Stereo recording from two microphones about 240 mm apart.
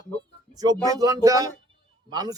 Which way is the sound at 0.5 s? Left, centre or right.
Centre.